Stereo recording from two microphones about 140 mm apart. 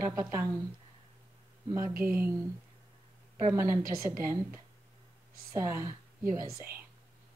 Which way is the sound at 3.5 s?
20° right (ahead or behind).